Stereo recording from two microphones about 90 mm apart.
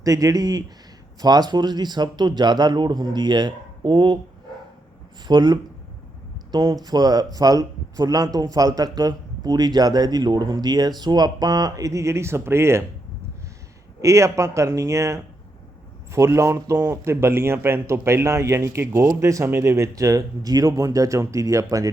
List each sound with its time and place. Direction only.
0.0 s a man's voice: 40° right (ahead or behind); by 4.2 s 60° right (ahead or behind)
5.3 s a man's voice: 55° right (ahead or behind)
6.8 s a man's voice: 50° right (ahead or behind); by 12.8 s 30° right (ahead or behind)
14.0 s a man's voice: 35° right (ahead or behind)